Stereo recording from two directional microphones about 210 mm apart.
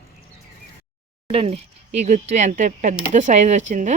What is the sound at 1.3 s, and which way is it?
A woman's voice, 30° right (ahead or behind).